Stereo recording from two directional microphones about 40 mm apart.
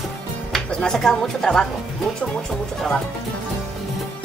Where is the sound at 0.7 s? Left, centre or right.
Left.